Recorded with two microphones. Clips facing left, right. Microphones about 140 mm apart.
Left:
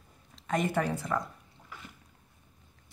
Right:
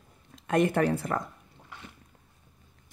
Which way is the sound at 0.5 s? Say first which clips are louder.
Right 5 dB; 55° right (ahead or behind).